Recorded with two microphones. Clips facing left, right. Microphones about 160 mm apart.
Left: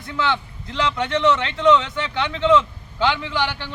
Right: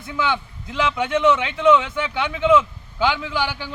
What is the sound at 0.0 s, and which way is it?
Speech, 10° right (ahead or behind).